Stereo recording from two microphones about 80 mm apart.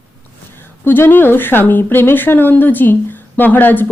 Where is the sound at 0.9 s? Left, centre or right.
Left.